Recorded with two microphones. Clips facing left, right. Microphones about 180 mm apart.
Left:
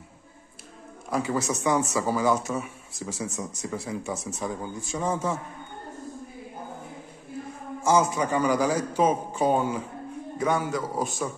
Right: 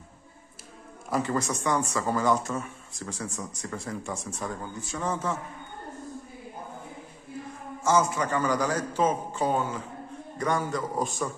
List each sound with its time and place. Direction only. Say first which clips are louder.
1.1 s a man's voice: left 1 dB; 5° left (ahead or behind)
8.0 s a man's voice: left 3 dB; 15° left (ahead or behind)